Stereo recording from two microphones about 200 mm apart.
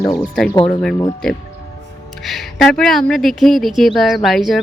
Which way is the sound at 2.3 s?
Centre (ahead or behind).